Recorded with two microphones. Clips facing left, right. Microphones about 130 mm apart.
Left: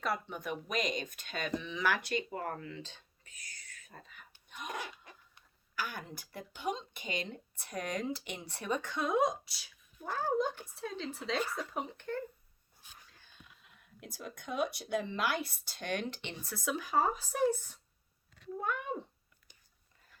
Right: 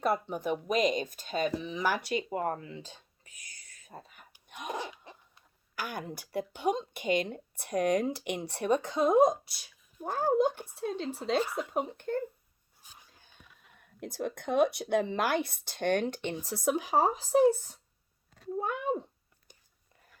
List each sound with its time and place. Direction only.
0.0 s speech: 35° right (ahead or behind)
3.8 s speech: 40° right (ahead or behind)
4.4 s cough: 50° right (ahead or behind)
4.7 s a sound: 25° right (ahead or behind)
5.7 s a woman's voice: 45° right (ahead or behind)
8.4 s a woman's voice: 40° right (ahead or behind)
13.7 s a woman's voice: 55° right (ahead or behind)
18.3 s a sound: 40° right (ahead or behind)